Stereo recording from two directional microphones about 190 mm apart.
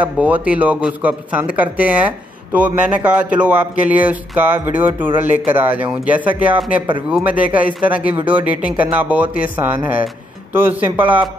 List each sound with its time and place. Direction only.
0.0 s speech: 10° right (ahead or behind)